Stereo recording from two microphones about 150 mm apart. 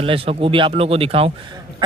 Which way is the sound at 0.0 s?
40° right (ahead or behind).